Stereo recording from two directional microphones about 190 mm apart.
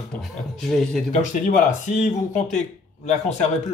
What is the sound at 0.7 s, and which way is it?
Speech, centre (ahead or behind).